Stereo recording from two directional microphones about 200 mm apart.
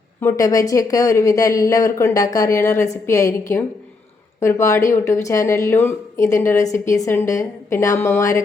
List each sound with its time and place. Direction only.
0.2 s speech: 15° left (ahead or behind)